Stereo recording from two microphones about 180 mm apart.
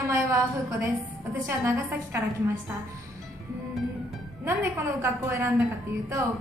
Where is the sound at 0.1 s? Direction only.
15° right (ahead or behind).